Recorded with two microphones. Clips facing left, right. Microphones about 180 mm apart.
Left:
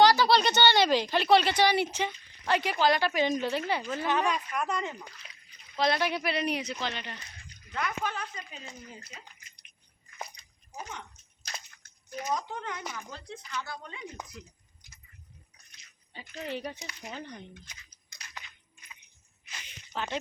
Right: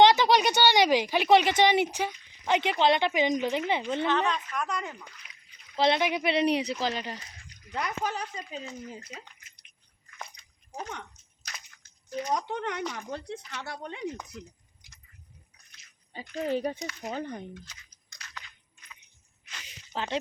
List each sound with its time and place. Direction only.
0.0 s speech: 20° right (ahead or behind)
4.1 s speech: 10° left (ahead or behind)
5.2 s splash: 35° left (ahead or behind)
5.7 s speech: 25° right (ahead or behind)
12.3 s speech: 70° right (ahead or behind)
16.3 s speech: 40° right (ahead or behind)
17.7 s speech: 15° left (ahead or behind)
18.2 s biting: 10° left (ahead or behind)
19.9 s speech: 30° right (ahead or behind)